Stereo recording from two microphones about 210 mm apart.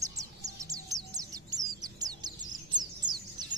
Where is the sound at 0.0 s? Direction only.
15° right (ahead or behind).